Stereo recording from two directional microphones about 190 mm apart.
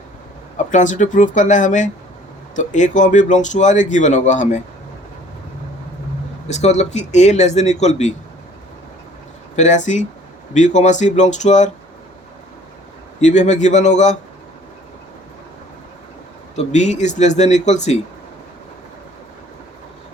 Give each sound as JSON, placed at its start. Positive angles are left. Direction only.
{"t": 0.5, "sound": "speech", "side_deg": 40}
{"t": 6.5, "sound": "speech", "side_deg": 35}
{"t": 9.6, "sound": "speech", "side_deg": 40}
{"t": 13.2, "sound": "speech", "side_deg": 40}
{"t": 16.6, "sound": "speech", "side_deg": 35}